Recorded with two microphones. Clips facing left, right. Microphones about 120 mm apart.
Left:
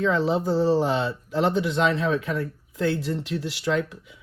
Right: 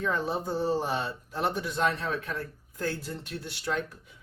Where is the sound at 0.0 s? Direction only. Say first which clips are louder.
Left 7 dB; 90° left.